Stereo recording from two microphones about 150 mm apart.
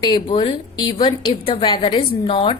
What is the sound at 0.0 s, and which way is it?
A woman's voice, 30° left (ahead or behind).